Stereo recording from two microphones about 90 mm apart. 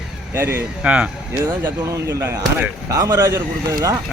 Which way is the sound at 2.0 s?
35° right (ahead or behind).